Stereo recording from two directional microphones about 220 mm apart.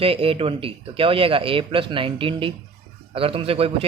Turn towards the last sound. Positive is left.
turn(degrees=-25)  # may be behind; listen again after turning